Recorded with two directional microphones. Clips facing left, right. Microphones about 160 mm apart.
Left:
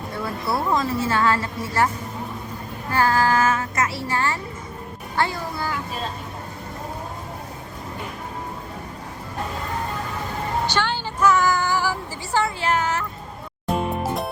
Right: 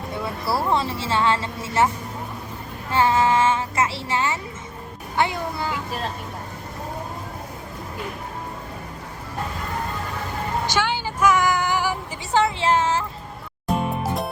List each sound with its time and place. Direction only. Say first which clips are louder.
0.2 s speech: even; centre (ahead or behind)
0.7 s speech: left 1 dB; 30° right (ahead or behind)
2.9 s speech: right 1 dB; 25° right (ahead or behind)
10.7 s a sound: right 1 dB; 10° right (ahead or behind); by 13.1 s 30° right (ahead or behind)